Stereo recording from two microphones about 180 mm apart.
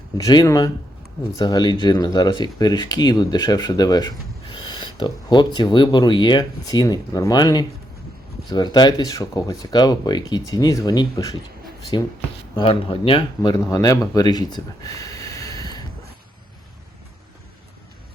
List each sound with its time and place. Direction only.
0.2 s speech: 20° left (ahead or behind)